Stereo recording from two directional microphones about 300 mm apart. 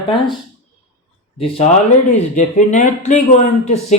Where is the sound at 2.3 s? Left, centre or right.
Left.